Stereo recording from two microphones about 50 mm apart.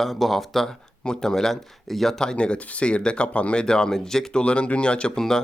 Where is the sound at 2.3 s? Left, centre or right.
Left.